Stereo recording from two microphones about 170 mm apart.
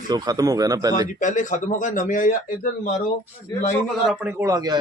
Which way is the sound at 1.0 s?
50° left (ahead or behind).